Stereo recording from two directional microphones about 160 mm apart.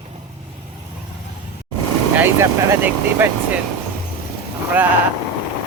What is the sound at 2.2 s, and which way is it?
Speech, 15° right (ahead or behind).